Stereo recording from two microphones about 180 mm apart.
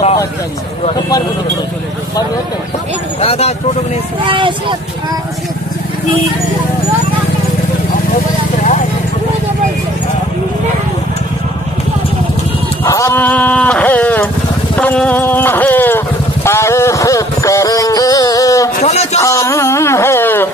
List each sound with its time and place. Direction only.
3.2 s speech: 35° left (ahead or behind)
4.2 s speech: 25° right (ahead or behind)
12.8 s a sound: 15° left (ahead or behind)
16.4 s music: 15° left (ahead or behind)
18.8 s a man's voice: 40° left (ahead or behind)
19.2 s music: 15° left (ahead or behind)